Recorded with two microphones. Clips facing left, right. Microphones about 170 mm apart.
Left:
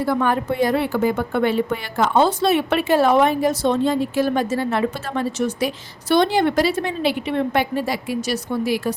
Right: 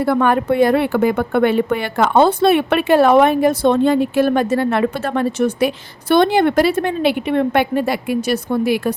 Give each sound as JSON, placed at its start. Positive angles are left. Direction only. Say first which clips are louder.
{"t": 0.0, "sound": "a woman's voice", "louder": "right 4 dB", "side_deg": -65}